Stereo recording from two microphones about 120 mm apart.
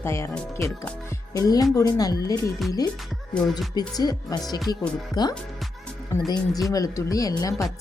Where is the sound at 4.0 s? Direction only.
30° left (ahead or behind).